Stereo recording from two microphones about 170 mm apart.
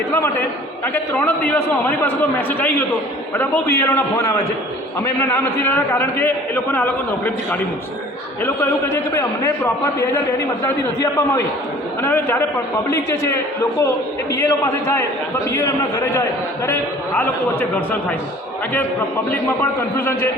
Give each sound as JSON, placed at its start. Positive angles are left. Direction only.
{"t": 0.1, "sound": "a man's voice", "side_deg": 15}
{"t": 8.4, "sound": "a man's voice", "side_deg": 15}
{"t": 12.0, "sound": "a man's voice", "side_deg": 15}